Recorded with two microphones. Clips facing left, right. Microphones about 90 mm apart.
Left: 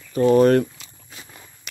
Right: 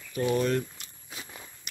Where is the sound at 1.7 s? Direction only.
90° left.